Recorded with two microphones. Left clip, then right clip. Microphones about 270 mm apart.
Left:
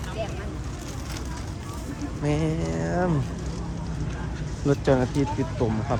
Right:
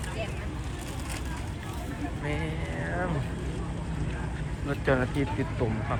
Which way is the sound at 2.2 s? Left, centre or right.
Left.